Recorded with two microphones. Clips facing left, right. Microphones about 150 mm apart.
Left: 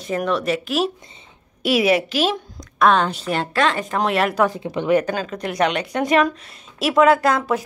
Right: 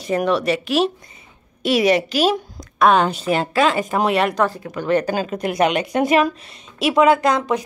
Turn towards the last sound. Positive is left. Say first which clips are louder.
# right 1 dB
turn(degrees=5)  # may be behind; listen again after turning